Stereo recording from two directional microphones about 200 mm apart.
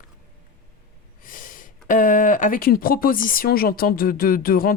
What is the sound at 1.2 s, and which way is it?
Snort, 40° left (ahead or behind).